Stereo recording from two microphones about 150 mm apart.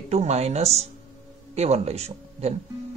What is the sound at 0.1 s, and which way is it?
Speech, 45° right (ahead or behind).